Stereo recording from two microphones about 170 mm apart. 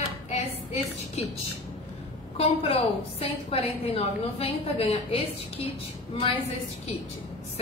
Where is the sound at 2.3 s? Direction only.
35° left (ahead or behind).